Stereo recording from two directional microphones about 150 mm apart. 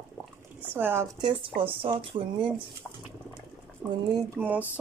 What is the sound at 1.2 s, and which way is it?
Speech, 35° right (ahead or behind).